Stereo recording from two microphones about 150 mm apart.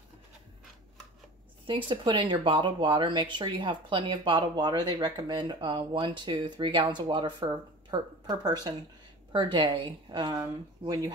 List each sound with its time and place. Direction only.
1.7 s speech: 35° right (ahead or behind)